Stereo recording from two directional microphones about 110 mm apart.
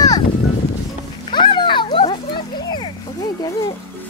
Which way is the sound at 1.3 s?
45° left (ahead or behind).